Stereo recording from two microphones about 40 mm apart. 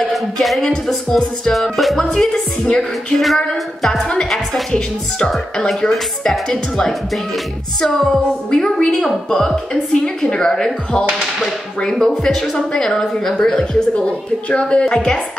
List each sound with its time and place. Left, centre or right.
0.1 s music: centre
2.0 s a woman's voice: centre
2.8 s music: centre
4.2 s a woman's voice: centre
5.8 s a woman's voice: centre
7.8 s a woman's voice: centre
10.0 s speech: centre
12.0 s a woman's voice: centre
13.5 s speech: left
14.9 s a woman's voice: centre